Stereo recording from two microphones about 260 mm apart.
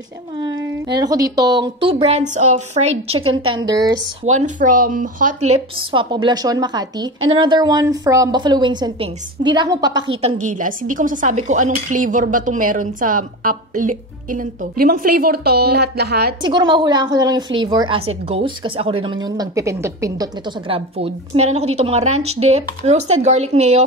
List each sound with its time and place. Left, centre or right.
0.4 s a woman's voice: centre
3.6 s a woman's voice: centre
4.3 s speech: right
5.5 s a woman's voice: right
10.3 s speech: right
16.4 s a woman's voice: centre